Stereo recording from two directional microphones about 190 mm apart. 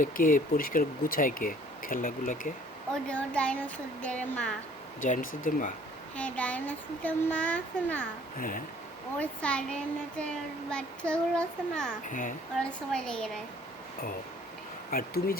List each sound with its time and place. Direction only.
0.0 s speech: 45° left (ahead or behind)
2.9 s speech: 5° left (ahead or behind)
4.9 s speech: 45° left (ahead or behind)
6.1 s speech: 5° left (ahead or behind)
8.4 s speech: 45° left (ahead or behind)
9.1 s a child's voice: 5° left (ahead or behind)
12.0 s speech: 45° left (ahead or behind)
12.5 s a child's voice: 5° left (ahead or behind)
14.8 s speech: 50° left (ahead or behind)